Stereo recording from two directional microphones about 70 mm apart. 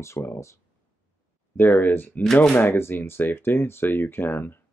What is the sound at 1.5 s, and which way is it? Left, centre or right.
Speech, left.